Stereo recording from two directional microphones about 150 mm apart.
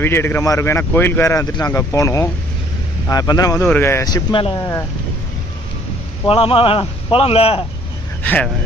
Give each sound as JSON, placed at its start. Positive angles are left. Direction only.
{"t": 0.0, "sound": "speech", "side_deg": 15}
{"t": 3.6, "sound": "speech", "side_deg": 15}
{"t": 6.2, "sound": "speech", "side_deg": 40}
{"t": 8.2, "sound": "a man's voice", "side_deg": 10}